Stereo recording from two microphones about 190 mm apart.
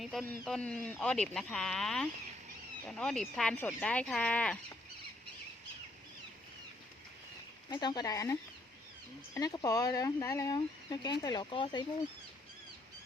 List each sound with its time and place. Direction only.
0.0 s speech: centre (ahead or behind)
7.7 s speech: 20° left (ahead or behind)